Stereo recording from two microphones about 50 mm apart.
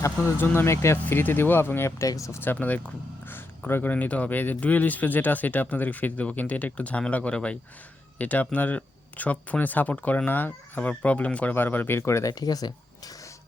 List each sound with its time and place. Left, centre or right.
0.2 s speech: left
0.6 s speech: left
1.2 s speech: left
2.0 s speech: left
2.4 s speech: left
10.2 s speech: left
10.8 s speech: left
11.5 s speech: left
11.9 s speech: left